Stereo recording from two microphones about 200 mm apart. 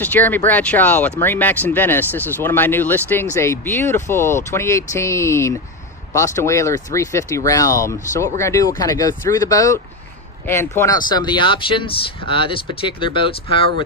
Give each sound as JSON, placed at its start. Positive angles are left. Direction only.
{"t": 0.0, "sound": "speech", "side_deg": 10}